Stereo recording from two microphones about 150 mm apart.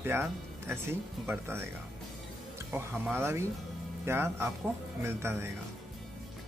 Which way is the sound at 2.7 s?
15° right (ahead or behind).